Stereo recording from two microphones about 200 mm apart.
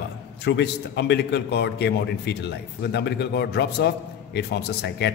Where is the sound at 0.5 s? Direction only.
60° left (ahead or behind).